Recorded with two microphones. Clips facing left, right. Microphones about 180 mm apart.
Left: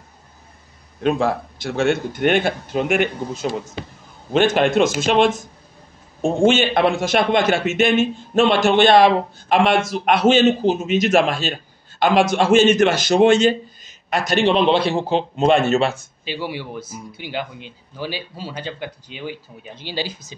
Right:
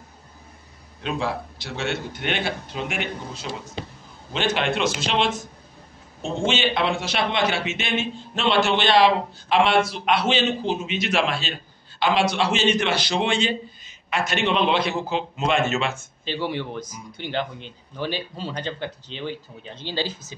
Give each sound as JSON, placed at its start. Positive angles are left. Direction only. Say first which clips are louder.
{"t": 1.0, "sound": "a man's voice", "louder": "left 8 dB", "side_deg": 50}
{"t": 16.3, "sound": "a man's voice", "louder": "even", "side_deg": 10}